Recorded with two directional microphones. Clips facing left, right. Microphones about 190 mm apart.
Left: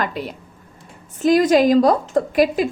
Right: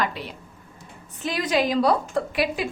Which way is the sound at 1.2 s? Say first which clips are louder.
Left 10 dB; 45° left (ahead or behind).